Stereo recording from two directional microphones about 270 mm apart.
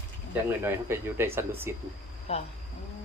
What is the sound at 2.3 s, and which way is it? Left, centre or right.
Speech, left.